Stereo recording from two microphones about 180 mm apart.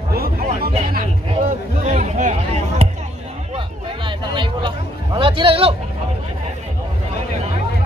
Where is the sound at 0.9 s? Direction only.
50° right (ahead or behind).